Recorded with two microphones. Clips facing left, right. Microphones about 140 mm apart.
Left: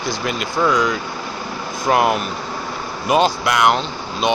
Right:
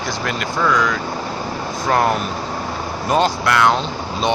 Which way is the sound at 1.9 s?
10° left (ahead or behind).